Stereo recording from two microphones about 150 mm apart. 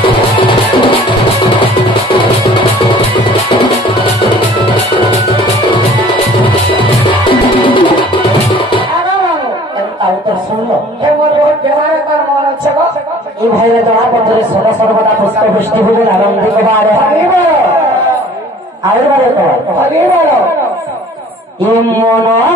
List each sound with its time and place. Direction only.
0.0 s music: 35° left (ahead or behind)
7.2 s music: 35° left (ahead or behind)
15.7 s a man's voice: 10° left (ahead or behind)